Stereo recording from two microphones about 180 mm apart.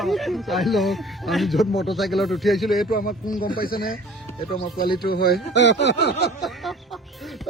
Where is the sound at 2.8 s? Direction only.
50° left (ahead or behind).